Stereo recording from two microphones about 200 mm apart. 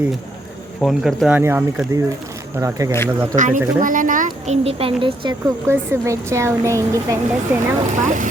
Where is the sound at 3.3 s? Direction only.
40° right (ahead or behind).